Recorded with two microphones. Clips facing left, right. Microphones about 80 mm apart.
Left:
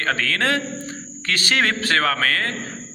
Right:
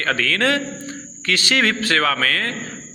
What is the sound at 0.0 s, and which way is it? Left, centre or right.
A man's voice, left.